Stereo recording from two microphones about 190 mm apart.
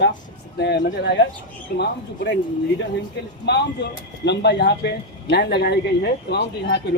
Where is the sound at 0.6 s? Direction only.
65° left (ahead or behind).